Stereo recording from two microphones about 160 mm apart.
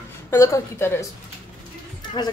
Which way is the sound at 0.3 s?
20° left (ahead or behind).